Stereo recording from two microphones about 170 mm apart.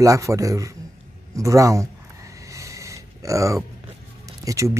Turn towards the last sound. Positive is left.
turn(degrees=-20)  # may be behind; listen again after turning